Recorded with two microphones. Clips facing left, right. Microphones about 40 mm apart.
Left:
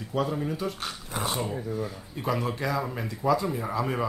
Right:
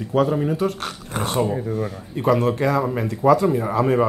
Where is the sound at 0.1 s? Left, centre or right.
Right.